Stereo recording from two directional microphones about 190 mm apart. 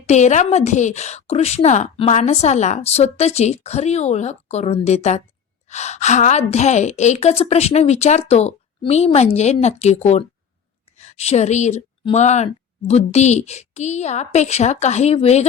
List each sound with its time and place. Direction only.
0.0 s a woman's voice: 35° left (ahead or behind)